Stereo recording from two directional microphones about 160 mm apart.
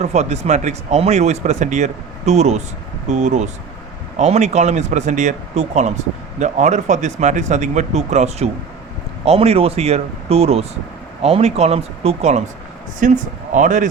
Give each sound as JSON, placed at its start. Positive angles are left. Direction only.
{"t": 0.0, "sound": "speech", "side_deg": -45}
{"t": 13.0, "sound": "speech", "side_deg": -50}